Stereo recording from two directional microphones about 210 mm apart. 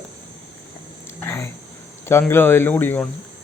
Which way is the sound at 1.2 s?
10° left (ahead or behind).